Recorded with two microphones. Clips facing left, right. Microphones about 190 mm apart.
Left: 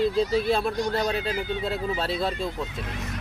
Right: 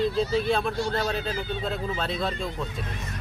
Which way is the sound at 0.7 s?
15° left (ahead or behind).